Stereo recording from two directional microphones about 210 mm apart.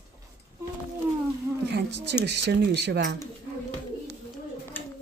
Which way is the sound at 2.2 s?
55° right (ahead or behind).